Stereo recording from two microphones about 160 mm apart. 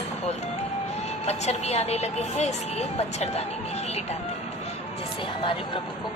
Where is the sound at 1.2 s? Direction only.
45° left (ahead or behind).